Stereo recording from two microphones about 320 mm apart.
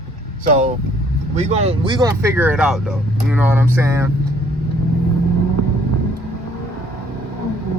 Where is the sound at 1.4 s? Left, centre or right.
Centre.